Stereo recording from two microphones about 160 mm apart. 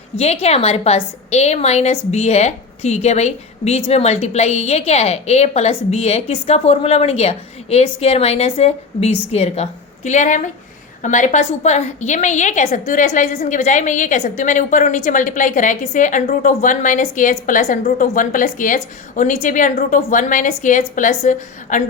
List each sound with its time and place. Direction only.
0.2 s a woman's voice: 40° left (ahead or behind)